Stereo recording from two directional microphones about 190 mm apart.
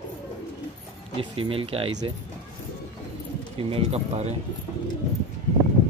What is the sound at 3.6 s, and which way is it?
Speech, 30° right (ahead or behind).